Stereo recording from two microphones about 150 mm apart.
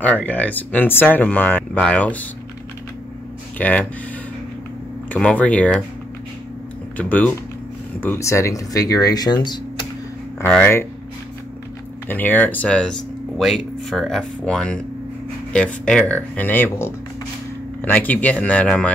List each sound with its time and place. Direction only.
0.0 s speech: 10° left (ahead or behind)
3.5 s speech: 10° left (ahead or behind)
5.1 s speech: 10° left (ahead or behind)
7.0 s speech: 10° left (ahead or behind); by 9.8 s 30° left (ahead or behind)
10.4 s speech: 10° left (ahead or behind)
12.1 s speech: 10° left (ahead or behind)